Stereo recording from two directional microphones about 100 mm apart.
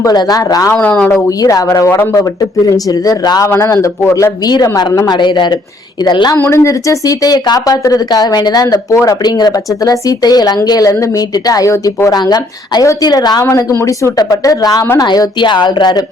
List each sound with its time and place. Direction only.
0.0 s speech: 40° left (ahead or behind)
0.7 s speech: 15° left (ahead or behind)
1.4 s speech: 35° left (ahead or behind)
3.4 s speech: 25° left (ahead or behind); by 6.3 s 50° left (ahead or behind)
6.3 s speech: 25° left (ahead or behind); by 13.4 s 45° left (ahead or behind)
13.4 s speech: 30° left (ahead or behind)